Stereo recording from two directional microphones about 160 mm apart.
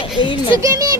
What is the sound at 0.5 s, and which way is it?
Speech, 20° right (ahead or behind).